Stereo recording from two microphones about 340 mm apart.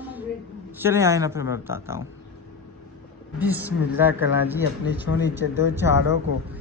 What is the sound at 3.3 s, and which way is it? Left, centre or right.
A man's voice, centre.